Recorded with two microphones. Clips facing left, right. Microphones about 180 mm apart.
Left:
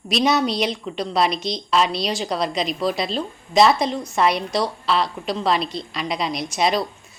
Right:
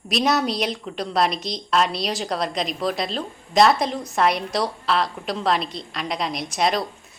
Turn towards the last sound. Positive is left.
turn(degrees=0)  # may be behind; listen again after turning